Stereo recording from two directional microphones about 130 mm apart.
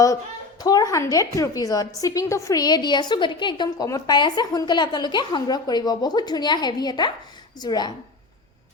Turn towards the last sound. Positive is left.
turn(degrees=35)  # may be behind; listen again after turning